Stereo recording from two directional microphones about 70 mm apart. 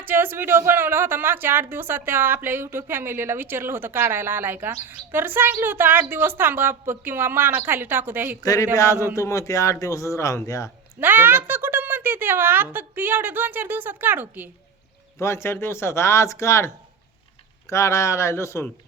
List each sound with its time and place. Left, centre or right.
0.0 s a woman's voice: right
8.4 s speech: left
11.0 s a woman's voice: right
15.2 s speech: left